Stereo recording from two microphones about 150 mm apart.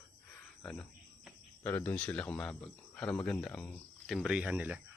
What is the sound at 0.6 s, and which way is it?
Speech, 5° left (ahead or behind).